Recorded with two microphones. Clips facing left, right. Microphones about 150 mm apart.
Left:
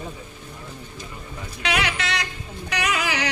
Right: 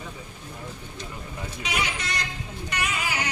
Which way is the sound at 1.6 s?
80° left.